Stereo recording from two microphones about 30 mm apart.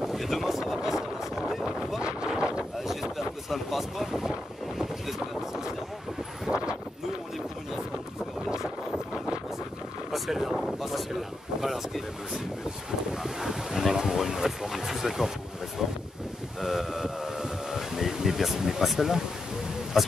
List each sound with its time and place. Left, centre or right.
0.0 s wind noise: centre
0.5 s speech: centre
0.8 s boat: centre
2.0 s wind noise: right
2.9 s vehicle: centre
4.7 s boat: centre
6.5 s a sound: right
10.1 s a sound: centre
11.6 s wind: centre
13.1 s boat: centre
13.9 s a sound: centre
16.6 s a sound: centre